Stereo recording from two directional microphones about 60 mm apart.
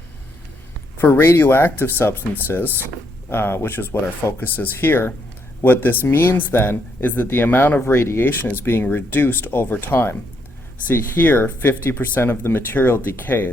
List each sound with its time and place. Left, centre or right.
0.9 s speech: left
7.8 s speech: left
8.2 s speech: left